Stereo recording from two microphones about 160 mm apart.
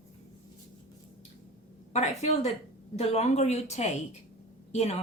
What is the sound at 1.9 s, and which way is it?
Speech, 45° left (ahead or behind).